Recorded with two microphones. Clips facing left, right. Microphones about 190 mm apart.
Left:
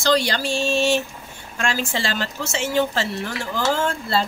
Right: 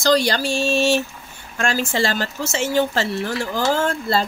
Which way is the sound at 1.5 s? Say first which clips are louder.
Right 3 dB; 45° right (ahead or behind).